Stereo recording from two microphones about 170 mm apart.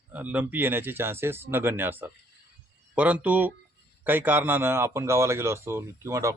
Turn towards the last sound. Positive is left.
turn(degrees=-15)  # may be behind; listen again after turning